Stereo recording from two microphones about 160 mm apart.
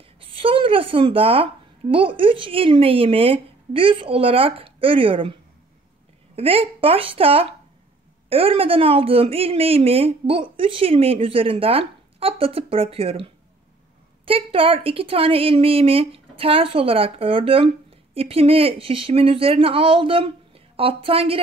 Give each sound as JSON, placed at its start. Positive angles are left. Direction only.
{"t": 0.2, "sound": "a woman's voice", "side_deg": -35}
{"t": 6.3, "sound": "a woman's voice", "side_deg": -35}